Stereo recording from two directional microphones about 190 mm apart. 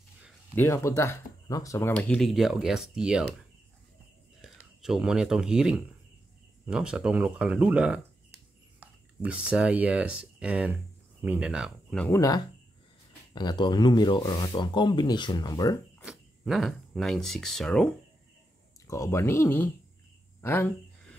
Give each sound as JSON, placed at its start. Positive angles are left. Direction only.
{"t": 0.6, "sound": "speech", "side_deg": 15}
{"t": 4.4, "sound": "speech", "side_deg": -5}
{"t": 12.1, "sound": "speech", "side_deg": 20}
{"t": 16.1, "sound": "speech", "side_deg": 0}
{"t": 18.9, "sound": "speech", "side_deg": 15}
{"t": 20.3, "sound": "a sound", "side_deg": 10}